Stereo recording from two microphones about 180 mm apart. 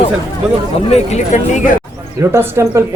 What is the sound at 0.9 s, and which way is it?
Speech, 35° left (ahead or behind).